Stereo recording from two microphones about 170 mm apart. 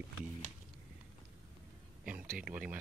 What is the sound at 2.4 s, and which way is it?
Speech, 5° right (ahead or behind).